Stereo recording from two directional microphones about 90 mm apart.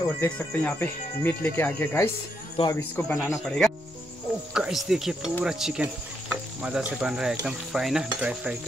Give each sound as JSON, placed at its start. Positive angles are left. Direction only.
{"t": 0.0, "sound": "speech", "side_deg": 25}
{"t": 3.4, "sound": "stir", "side_deg": 5}
{"t": 5.4, "sound": "a sound", "side_deg": -5}
{"t": 7.4, "sound": "stir", "side_deg": -5}